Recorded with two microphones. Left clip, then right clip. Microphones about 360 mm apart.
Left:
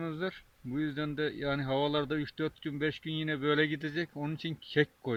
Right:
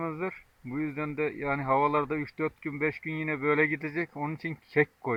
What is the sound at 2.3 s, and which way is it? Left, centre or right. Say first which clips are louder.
Speech: right 3 dB; centre.